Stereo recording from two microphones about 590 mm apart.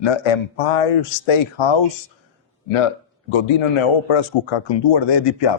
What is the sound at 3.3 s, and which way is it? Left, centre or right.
Speech, left.